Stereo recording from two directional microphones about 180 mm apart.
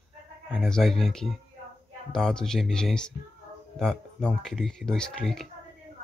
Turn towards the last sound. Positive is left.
turn(degrees=5)  # may be behind; listen again after turning